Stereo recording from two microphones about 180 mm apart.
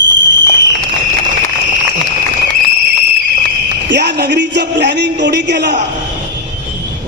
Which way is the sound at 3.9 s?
65° right (ahead or behind).